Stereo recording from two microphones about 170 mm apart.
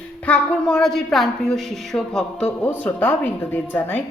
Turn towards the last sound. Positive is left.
turn(degrees=10)  # may be behind; listen again after turning